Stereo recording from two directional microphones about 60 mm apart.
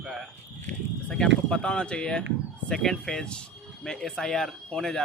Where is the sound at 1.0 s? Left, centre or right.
Centre.